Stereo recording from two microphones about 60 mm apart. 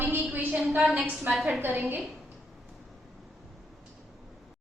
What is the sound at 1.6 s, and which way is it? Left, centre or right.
Speech, right.